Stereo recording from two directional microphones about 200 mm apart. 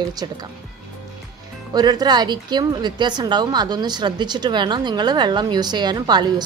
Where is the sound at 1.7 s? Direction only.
20° right (ahead or behind).